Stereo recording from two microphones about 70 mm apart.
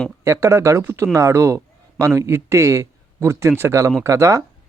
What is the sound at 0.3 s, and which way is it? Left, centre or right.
A man's voice, right.